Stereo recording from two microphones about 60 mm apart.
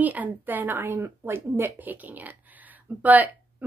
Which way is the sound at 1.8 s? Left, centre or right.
Right.